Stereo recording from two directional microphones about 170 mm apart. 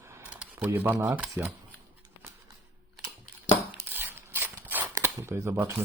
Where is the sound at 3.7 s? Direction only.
10° right (ahead or behind).